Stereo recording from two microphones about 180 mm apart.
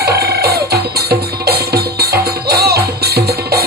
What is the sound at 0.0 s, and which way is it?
Music, 60° right (ahead or behind).